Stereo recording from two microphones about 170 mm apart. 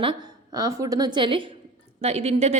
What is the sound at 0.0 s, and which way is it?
A woman's voice, 25° right (ahead or behind).